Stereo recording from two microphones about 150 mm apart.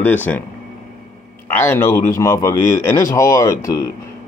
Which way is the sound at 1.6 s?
15° left (ahead or behind).